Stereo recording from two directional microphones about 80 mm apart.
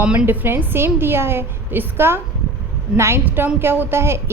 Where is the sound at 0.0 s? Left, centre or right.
Centre.